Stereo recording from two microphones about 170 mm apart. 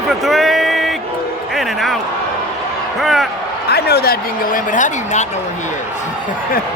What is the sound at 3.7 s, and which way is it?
Speech, 70° left (ahead or behind).